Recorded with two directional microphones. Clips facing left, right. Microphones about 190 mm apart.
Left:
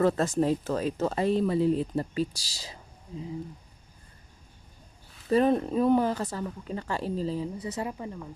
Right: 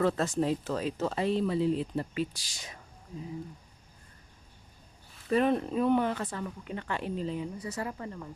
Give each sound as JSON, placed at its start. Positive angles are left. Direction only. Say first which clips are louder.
{"t": 0.0, "sound": "speech", "louder": "left 3 dB", "side_deg": 45}
{"t": 5.3, "sound": "speech", "louder": "left 3 dB", "side_deg": 35}
{"t": 7.8, "sound": "speech", "louder": "left 2 dB", "side_deg": 15}